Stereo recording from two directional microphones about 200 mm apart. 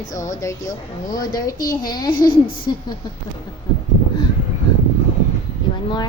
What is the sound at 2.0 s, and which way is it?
Speech, 45° left (ahead or behind).